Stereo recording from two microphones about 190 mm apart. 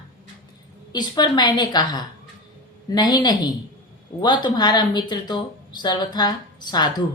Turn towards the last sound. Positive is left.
turn(degrees=20)  # may be behind; listen again after turning